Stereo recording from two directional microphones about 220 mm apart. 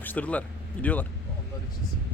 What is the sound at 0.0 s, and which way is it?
Speech, 5° left (ahead or behind).